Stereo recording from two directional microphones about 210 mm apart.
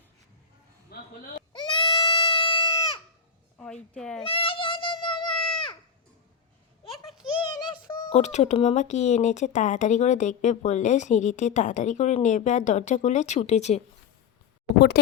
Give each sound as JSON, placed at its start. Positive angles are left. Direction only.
{"t": 0.9, "sound": "hiccup", "side_deg": 45}
{"t": 1.5, "sound": "goat", "side_deg": 20}
{"t": 3.9, "sound": "speech", "side_deg": 5}
{"t": 4.2, "sound": "goat", "side_deg": 25}
{"t": 6.9, "sound": "a sound", "side_deg": 0}
{"t": 7.5, "sound": "a sound", "side_deg": 20}
{"t": 8.1, "sound": "speech", "side_deg": 35}